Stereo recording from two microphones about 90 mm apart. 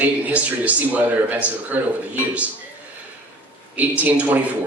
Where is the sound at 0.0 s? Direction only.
15° right (ahead or behind).